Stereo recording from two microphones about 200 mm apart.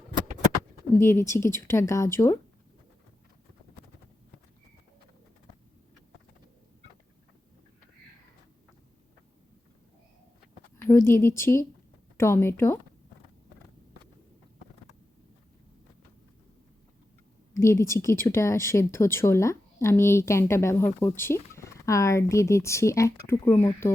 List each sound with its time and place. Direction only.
0.9 s speech: 15° left (ahead or behind)
10.8 s speech: 10° left (ahead or behind)
17.5 s speech: 15° left (ahead or behind)